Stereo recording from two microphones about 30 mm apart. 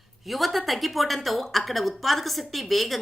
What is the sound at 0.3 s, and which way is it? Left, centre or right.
A woman's voice, centre.